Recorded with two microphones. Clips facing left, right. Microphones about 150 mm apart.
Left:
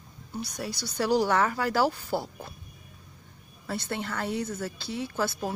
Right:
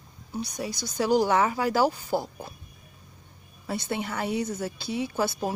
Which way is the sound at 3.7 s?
10° right (ahead or behind).